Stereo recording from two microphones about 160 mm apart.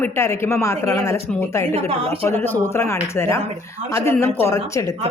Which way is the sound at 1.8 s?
40° right (ahead or behind).